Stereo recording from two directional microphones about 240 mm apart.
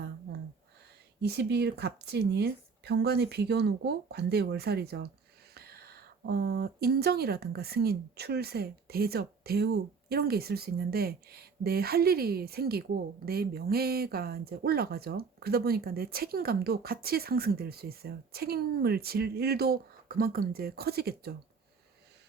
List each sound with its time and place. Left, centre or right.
1.2 s speech: right